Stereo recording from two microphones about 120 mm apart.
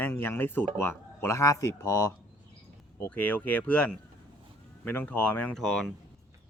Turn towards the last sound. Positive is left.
turn(degrees=5)  # may be behind; listen again after turning